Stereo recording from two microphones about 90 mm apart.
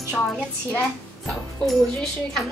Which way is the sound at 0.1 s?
10° left (ahead or behind).